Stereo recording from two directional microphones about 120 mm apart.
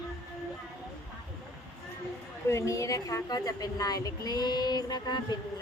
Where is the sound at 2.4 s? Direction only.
25° left (ahead or behind).